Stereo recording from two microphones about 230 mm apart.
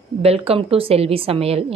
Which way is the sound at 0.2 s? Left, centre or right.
Right.